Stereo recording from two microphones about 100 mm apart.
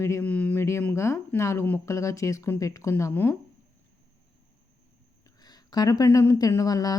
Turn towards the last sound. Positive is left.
turn(degrees=35)  # may be behind; listen again after turning